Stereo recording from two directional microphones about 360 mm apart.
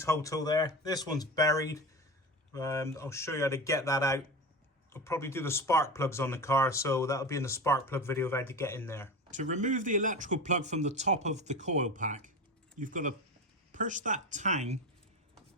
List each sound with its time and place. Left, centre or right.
0.0 s speech: centre
9.3 s speech: centre